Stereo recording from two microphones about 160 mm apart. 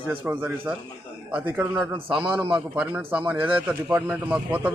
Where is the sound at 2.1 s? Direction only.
30° right (ahead or behind).